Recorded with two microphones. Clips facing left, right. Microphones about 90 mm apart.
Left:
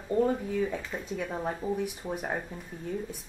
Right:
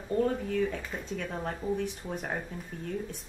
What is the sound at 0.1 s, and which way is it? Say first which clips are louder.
Speech: left 2 dB; 10° left (ahead or behind).